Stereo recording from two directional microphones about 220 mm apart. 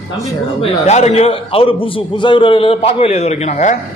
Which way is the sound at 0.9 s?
30° left (ahead or behind).